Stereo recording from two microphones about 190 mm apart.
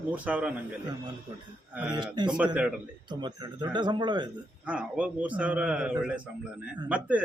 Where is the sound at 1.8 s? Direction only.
25° right (ahead or behind).